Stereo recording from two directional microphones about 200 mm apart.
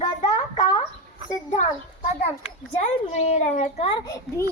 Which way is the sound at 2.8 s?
35° left (ahead or behind).